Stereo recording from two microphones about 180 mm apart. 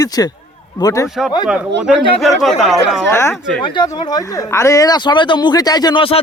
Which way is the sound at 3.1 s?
15° left (ahead or behind).